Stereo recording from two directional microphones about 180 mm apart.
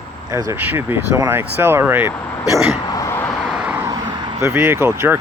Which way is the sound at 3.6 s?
20° right (ahead or behind).